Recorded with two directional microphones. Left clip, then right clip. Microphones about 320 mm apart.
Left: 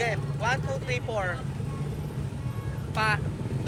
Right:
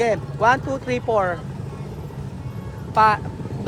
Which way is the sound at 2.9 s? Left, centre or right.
Centre.